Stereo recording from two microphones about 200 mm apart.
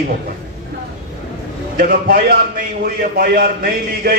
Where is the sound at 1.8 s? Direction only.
50° right (ahead or behind).